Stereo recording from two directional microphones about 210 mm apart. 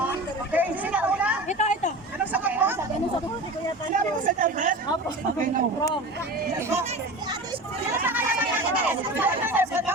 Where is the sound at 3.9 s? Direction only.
40° right (ahead or behind).